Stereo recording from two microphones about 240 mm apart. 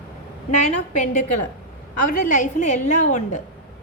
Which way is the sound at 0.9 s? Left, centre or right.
Left.